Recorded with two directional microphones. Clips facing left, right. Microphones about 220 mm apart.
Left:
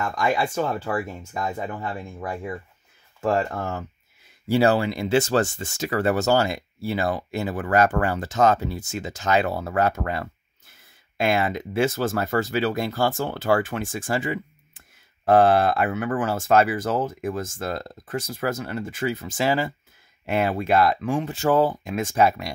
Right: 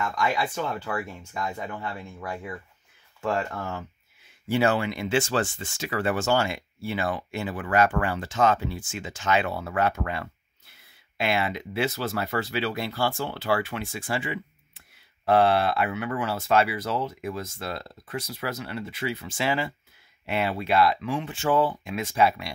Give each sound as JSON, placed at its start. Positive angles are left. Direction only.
{"t": 0.0, "sound": "speech", "side_deg": 45}